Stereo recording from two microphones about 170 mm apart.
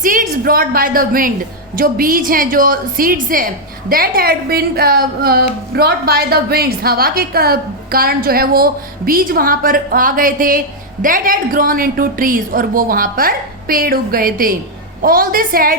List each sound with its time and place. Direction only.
0.0 s a woman's voice: 50° right (ahead or behind)